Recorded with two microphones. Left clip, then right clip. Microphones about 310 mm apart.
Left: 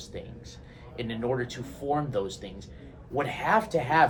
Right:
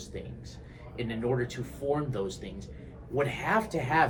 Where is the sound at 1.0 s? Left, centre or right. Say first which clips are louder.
Left 1 dB; centre.